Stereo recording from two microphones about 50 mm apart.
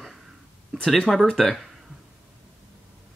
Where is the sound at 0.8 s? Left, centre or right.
Centre.